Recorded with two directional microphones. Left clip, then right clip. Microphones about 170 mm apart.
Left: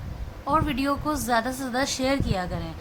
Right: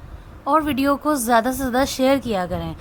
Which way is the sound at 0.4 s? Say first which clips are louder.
Right 6 dB; 45° right (ahead or behind).